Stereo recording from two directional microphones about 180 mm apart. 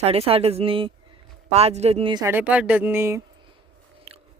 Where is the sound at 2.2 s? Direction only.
10° right (ahead or behind).